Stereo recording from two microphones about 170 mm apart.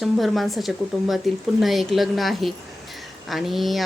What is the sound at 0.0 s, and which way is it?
Speech, centre (ahead or behind).